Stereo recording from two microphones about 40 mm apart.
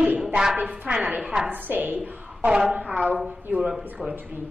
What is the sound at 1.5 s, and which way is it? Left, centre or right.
A woman's voice, right.